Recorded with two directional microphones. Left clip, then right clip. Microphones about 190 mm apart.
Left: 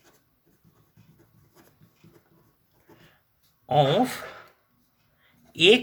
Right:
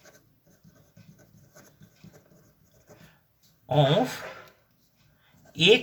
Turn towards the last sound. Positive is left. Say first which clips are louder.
# left 2 dB
turn(degrees=40)  # may be behind; listen again after turning